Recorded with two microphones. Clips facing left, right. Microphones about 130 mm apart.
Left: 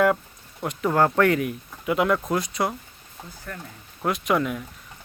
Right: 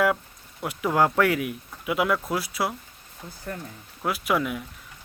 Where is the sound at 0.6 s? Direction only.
10° right (ahead or behind).